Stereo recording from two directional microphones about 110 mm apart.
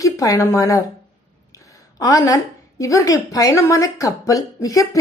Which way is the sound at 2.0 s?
30° left (ahead or behind).